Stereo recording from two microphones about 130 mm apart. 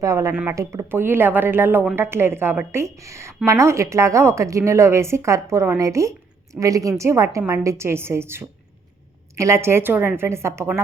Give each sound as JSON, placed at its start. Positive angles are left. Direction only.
{"t": 0.0, "sound": "a woman's voice", "side_deg": -25}